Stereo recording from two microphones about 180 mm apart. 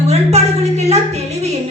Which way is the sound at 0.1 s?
35° right (ahead or behind).